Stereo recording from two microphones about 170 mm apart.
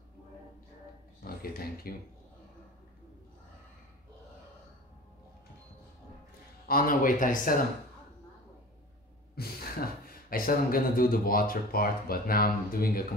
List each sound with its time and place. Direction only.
1.2 s speech: 60° left (ahead or behind)
6.7 s speech: 55° left (ahead or behind)
9.3 s sigh: 65° left (ahead or behind)
10.3 s speech: 55° left (ahead or behind)